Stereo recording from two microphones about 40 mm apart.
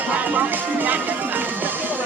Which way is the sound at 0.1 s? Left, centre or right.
Right.